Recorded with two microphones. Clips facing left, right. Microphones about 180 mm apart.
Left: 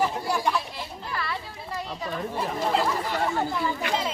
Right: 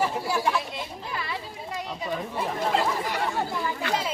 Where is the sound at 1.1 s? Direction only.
15° right (ahead or behind).